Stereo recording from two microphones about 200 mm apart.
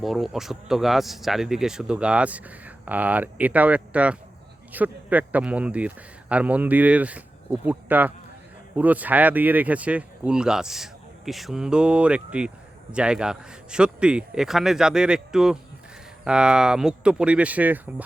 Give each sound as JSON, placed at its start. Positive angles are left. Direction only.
{"t": 0.0, "sound": "speech", "side_deg": 0}